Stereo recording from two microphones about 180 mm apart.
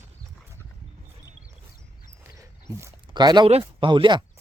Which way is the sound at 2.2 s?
15° right (ahead or behind).